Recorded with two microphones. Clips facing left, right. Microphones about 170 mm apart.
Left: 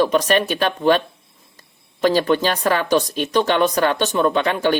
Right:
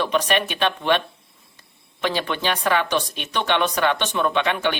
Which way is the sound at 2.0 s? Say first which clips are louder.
Left 7 dB; 40° left (ahead or behind).